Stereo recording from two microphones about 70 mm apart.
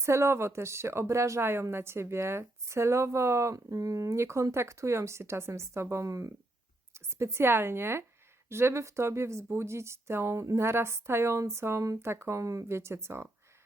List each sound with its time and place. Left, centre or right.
0.0 s a woman's voice: right